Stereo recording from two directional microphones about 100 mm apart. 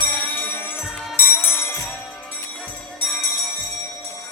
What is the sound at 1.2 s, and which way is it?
Music, 20° left (ahead or behind).